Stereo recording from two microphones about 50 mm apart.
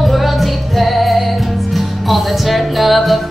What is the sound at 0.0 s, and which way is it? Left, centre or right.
Music, centre.